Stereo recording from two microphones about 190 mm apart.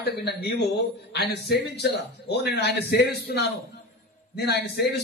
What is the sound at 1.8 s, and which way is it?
A man's voice, 60° left (ahead or behind).